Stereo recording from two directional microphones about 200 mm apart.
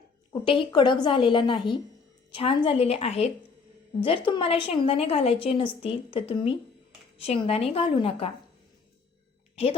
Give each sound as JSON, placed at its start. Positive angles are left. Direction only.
{"t": 0.4, "sound": "a woman's voice", "side_deg": 25}